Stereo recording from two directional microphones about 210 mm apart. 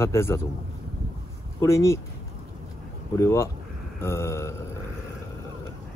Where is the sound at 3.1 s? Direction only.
10° left (ahead or behind).